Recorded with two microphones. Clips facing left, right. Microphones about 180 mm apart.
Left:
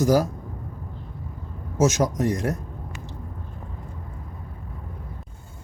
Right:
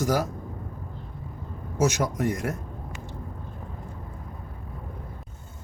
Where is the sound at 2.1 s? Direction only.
25° left (ahead or behind).